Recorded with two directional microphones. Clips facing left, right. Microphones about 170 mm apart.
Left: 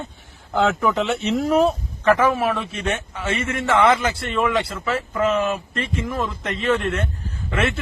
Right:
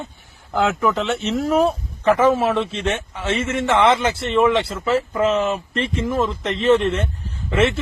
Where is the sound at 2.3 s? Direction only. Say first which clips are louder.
Right 3 dB; 25° right (ahead or behind).